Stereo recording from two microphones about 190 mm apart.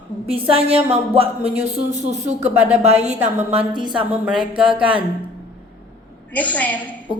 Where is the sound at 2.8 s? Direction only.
35° right (ahead or behind).